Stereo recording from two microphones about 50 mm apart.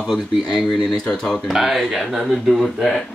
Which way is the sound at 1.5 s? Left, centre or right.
Centre.